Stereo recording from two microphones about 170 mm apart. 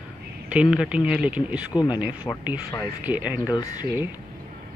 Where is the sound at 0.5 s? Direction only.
5° right (ahead or behind).